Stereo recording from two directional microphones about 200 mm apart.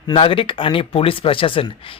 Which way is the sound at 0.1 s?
25° left (ahead or behind).